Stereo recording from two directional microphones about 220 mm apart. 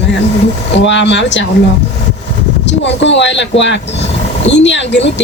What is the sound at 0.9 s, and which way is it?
Speech, 55° left (ahead or behind).